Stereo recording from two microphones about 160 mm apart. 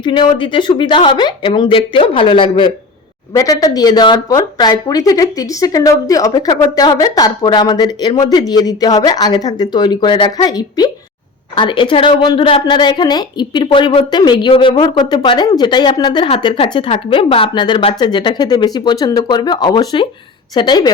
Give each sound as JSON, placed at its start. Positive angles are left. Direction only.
{"t": 0.0, "sound": "a woman's voice", "side_deg": 30}